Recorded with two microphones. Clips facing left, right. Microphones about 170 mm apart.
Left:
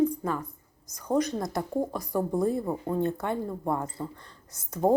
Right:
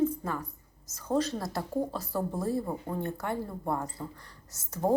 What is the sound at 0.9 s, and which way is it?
A woman's voice, 15° left (ahead or behind).